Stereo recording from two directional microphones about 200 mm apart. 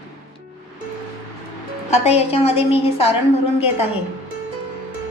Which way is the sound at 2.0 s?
30° left (ahead or behind).